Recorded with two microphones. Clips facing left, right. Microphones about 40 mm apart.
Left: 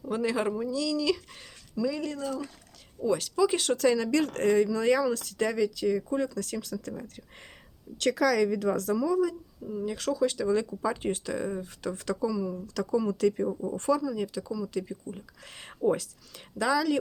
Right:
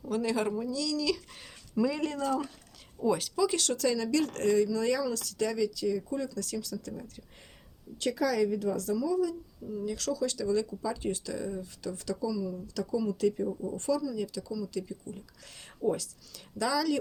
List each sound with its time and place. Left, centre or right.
0.0 s speech: centre
1.8 s speech: right
3.0 s speech: centre
3.3 s speech: centre
3.6 s speech: left
7.9 s a woman's voice: left
9.6 s speech: left